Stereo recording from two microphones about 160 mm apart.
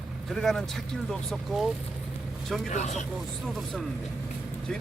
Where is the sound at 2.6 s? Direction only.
45° left (ahead or behind).